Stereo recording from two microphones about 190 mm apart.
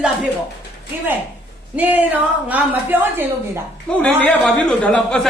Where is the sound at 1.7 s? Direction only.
10° right (ahead or behind).